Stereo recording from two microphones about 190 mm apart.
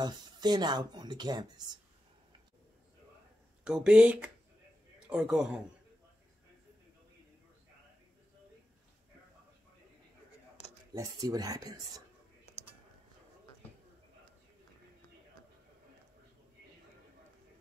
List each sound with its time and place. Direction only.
0.0 s speech: 20° right (ahead or behind)
3.6 s a man's voice: 5° right (ahead or behind)
10.9 s speech: 20° right (ahead or behind)